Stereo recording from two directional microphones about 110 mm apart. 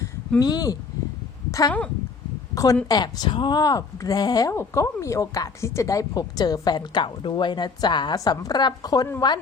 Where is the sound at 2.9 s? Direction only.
40° left (ahead or behind).